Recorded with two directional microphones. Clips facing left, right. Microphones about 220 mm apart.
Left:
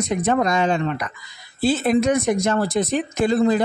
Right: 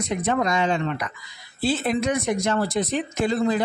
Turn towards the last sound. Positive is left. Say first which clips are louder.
# left 4 dB
turn(degrees=45)  # may be behind; listen again after turning